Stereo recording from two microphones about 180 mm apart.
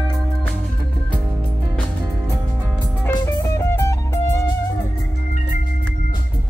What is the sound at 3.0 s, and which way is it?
Music, 15° left (ahead or behind).